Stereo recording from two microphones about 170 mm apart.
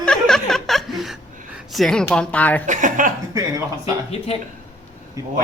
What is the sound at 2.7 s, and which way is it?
Speech, 50° right (ahead or behind).